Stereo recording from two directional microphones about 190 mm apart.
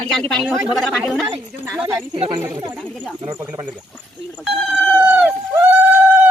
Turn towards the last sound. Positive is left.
turn(degrees=-10)  # may be behind; listen again after turning